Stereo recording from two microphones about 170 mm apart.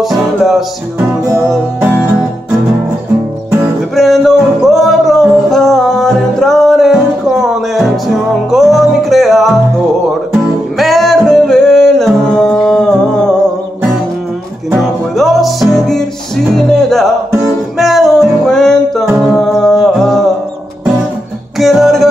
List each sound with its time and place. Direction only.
0.0 s music: centre (ahead or behind)
1.5 s music: 10° right (ahead or behind)
3.9 s music: centre (ahead or behind)
14.7 s music: centre (ahead or behind)
21.5 s music: centre (ahead or behind)